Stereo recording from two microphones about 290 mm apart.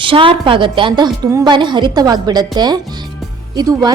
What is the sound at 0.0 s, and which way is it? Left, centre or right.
A woman's voice, centre.